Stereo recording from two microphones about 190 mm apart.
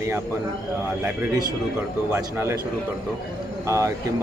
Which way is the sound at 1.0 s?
10° right (ahead or behind).